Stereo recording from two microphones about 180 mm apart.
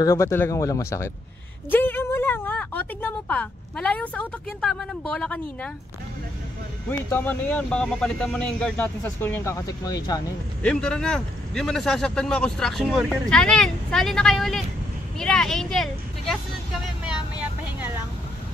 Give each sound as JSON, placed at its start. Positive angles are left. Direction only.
{"t": 0.0, "sound": "speech", "side_deg": 15}
{"t": 6.9, "sound": "speech", "side_deg": 10}
{"t": 10.6, "sound": "a man's voice", "side_deg": 5}
{"t": 15.1, "sound": "vehicle", "side_deg": 5}